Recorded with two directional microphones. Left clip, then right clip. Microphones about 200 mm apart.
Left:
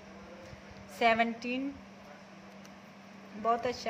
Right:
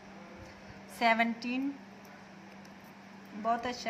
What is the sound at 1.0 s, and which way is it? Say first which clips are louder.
Speech: left 1 dB; 15° left (ahead or behind).